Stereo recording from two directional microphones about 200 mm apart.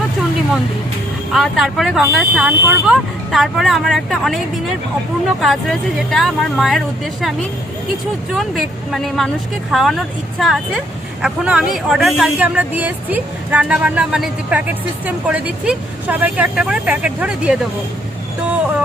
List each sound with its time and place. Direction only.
1.3 s speech: centre (ahead or behind)
5.4 s speech: centre (ahead or behind)
8.4 s speech: centre (ahead or behind)